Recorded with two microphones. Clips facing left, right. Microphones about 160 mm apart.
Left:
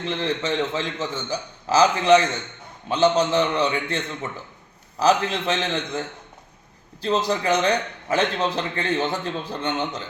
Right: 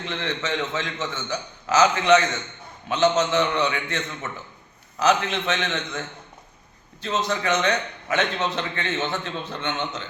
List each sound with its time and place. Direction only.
0.1 s a man's voice: 35° left (ahead or behind)